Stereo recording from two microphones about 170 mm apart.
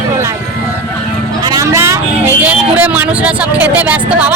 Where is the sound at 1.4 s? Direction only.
20° right (ahead or behind).